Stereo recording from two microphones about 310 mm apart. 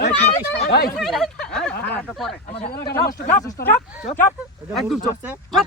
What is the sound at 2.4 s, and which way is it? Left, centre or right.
Speech, left.